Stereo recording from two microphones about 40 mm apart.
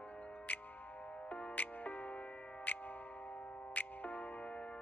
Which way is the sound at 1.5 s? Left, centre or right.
Left.